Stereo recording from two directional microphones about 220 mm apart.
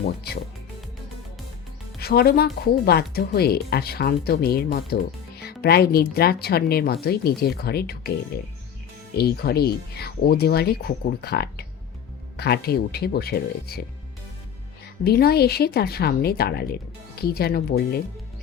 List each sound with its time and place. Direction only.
2.0 s speech: 45° left (ahead or behind)
9.1 s speech: 45° left (ahead or behind)
15.0 s speech: 45° left (ahead or behind)